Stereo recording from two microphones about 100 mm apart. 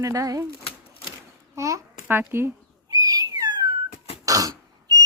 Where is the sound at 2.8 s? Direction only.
35° right (ahead or behind).